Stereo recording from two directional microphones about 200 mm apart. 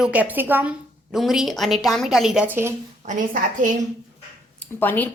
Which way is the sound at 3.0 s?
35° right (ahead or behind).